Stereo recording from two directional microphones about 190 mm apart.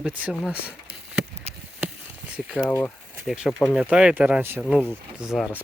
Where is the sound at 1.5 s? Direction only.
35° right (ahead or behind).